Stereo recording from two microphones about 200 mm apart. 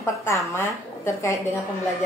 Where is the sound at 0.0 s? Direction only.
15° left (ahead or behind).